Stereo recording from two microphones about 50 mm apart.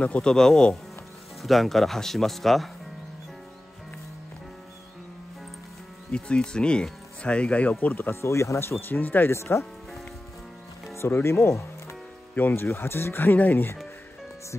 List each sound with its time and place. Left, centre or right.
0.0 s speech: left
0.3 s speech: centre
1.4 s speech: centre
6.1 s speech: left
7.8 s speech: left
8.1 s speech: left
8.5 s speech: left
9.3 s speech: left
11.1 s speech: left
12.4 s speech: left